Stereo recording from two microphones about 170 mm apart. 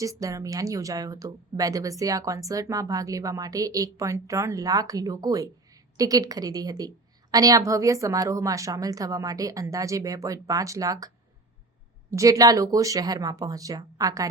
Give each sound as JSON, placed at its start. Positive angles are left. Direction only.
{"t": 0.0, "sound": "speech", "side_deg": -20}
{"t": 12.1, "sound": "speech", "side_deg": -20}